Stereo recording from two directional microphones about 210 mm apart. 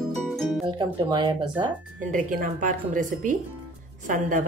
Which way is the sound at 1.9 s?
40° right (ahead or behind).